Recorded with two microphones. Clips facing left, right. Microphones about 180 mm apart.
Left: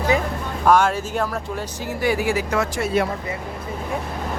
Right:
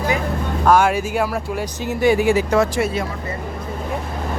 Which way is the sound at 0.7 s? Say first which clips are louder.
Right 2 dB; 10° right (ahead or behind).